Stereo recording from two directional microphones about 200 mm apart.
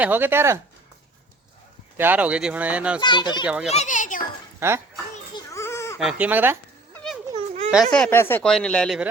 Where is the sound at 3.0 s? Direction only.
20° left (ahead or behind).